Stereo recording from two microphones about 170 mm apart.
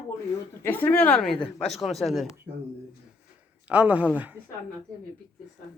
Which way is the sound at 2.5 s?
10° right (ahead or behind).